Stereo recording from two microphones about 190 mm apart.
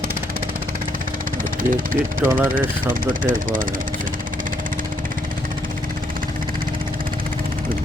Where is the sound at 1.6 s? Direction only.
45° right (ahead or behind).